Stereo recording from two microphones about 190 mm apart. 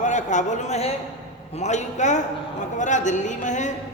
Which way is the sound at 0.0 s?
40° left (ahead or behind).